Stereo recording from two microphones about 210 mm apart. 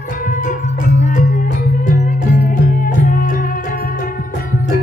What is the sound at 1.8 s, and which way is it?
Music, 35° left (ahead or behind).